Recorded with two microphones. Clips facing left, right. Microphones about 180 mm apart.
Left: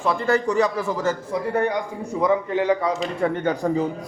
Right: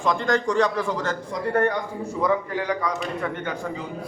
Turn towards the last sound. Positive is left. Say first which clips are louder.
# left 8 dB
turn(degrees=40)  # may be behind; listen again after turning